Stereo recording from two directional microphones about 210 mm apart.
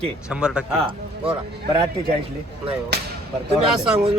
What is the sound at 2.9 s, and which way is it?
Speech, 50° right (ahead or behind).